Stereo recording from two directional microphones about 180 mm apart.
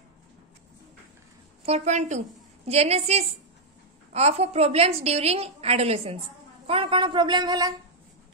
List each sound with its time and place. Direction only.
1.7 s a woman's voice: 40° right (ahead or behind); by 7.7 s 25° right (ahead or behind)